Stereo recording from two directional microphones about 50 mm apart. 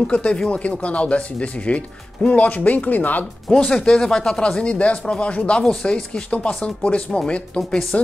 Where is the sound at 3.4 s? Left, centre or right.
Centre; by 7.8 s left.